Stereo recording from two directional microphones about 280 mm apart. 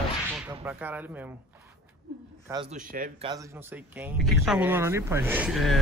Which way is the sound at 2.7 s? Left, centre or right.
Right.